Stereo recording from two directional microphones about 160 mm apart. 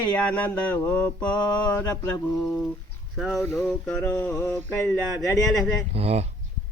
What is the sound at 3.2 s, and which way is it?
Speech, centre (ahead or behind).